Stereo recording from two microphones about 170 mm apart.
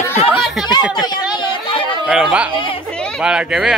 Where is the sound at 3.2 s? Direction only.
5° right (ahead or behind).